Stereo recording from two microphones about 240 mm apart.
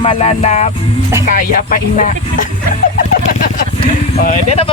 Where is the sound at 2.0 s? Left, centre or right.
Left.